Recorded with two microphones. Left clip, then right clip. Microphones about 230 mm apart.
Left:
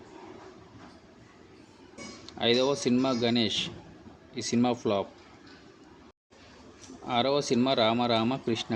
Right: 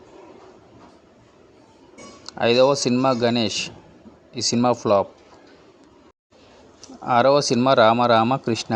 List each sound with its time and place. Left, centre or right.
2.5 s a man's voice: right
7.0 s a man's voice: right